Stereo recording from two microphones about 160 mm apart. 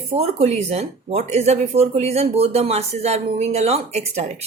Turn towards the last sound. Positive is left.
turn(degrees=-45)  # may be behind; listen again after turning